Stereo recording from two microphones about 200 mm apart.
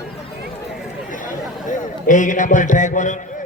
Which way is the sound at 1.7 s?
40° left (ahead or behind).